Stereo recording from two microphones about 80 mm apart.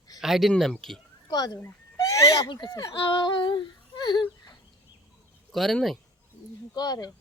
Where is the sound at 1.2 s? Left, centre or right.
Left.